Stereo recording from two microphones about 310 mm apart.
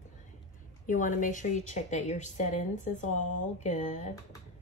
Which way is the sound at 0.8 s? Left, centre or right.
Left.